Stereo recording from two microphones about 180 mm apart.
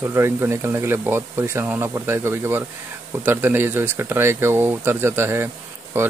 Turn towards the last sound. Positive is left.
turn(degrees=-15)  # may be behind; listen again after turning